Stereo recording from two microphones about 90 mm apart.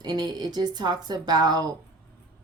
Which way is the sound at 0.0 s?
50° right (ahead or behind).